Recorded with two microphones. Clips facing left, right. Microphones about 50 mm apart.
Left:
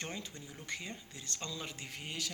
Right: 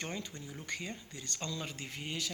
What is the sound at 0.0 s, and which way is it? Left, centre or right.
Speech, centre.